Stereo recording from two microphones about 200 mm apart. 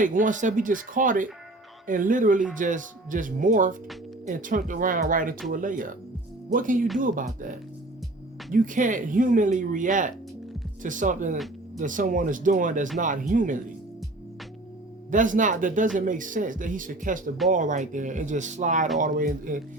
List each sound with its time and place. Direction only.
0.0 s speech: 40° right (ahead or behind)
8.5 s speech: 40° right (ahead or behind)
15.1 s speech: 40° right (ahead or behind)